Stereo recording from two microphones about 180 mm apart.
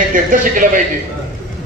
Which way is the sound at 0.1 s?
50° right (ahead or behind).